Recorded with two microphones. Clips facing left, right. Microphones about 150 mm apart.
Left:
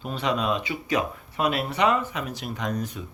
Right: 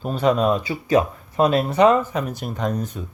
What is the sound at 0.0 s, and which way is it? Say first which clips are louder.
Speech: right 8 dB; 45° right (ahead or behind).